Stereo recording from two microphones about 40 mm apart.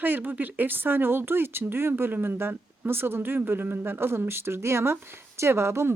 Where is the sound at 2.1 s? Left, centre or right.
Right.